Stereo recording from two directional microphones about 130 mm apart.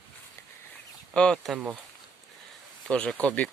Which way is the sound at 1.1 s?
5° left (ahead or behind).